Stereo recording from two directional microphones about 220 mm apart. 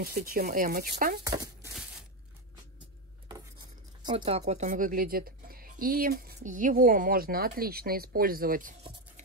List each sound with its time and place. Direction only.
0.0 s speech: 45° right (ahead or behind)
1.2 s speech: 15° right (ahead or behind)
3.3 s speech: 20° right (ahead or behind); by 8.7 s 40° right (ahead or behind)